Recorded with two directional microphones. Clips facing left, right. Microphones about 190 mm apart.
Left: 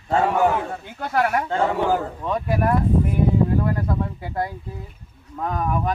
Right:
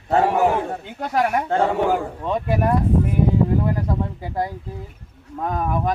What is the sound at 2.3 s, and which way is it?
Speech, 25° right (ahead or behind).